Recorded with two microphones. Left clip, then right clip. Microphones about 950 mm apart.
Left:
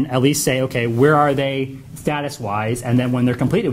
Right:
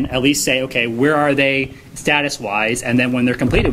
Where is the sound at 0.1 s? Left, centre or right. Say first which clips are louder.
Right 2 dB; left.